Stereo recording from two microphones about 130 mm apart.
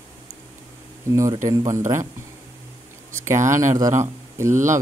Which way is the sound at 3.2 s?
20° right (ahead or behind).